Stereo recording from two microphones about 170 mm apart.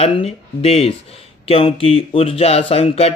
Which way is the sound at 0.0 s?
35° left (ahead or behind).